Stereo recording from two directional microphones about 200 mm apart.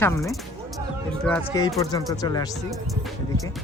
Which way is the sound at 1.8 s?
20° left (ahead or behind).